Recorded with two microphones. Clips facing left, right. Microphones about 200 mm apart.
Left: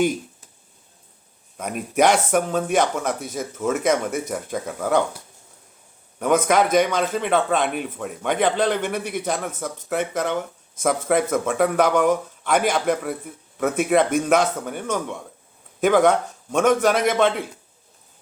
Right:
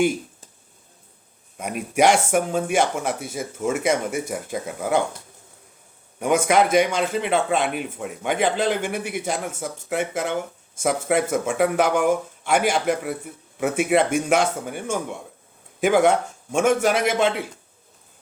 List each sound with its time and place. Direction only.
1.5 s speech: 10° right (ahead or behind)
6.1 s speech: 10° right (ahead or behind)
16.9 s speech: 50° left (ahead or behind)
17.2 s speech: 10° right (ahead or behind)